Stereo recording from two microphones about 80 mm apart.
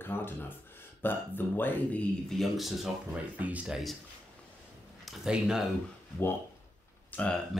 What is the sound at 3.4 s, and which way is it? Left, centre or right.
Speech, centre.